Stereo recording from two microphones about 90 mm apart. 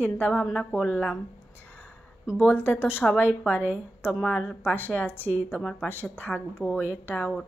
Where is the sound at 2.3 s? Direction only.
20° left (ahead or behind).